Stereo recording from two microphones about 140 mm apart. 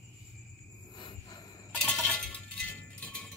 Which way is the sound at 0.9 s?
35° left (ahead or behind).